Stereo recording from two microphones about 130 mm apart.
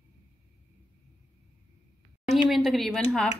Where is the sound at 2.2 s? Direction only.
Centre (ahead or behind).